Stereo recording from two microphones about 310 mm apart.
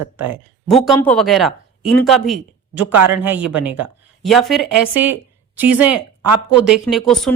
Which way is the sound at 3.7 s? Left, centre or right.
Right.